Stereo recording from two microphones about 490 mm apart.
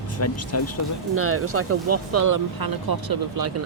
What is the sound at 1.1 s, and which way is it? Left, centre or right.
Speech, right.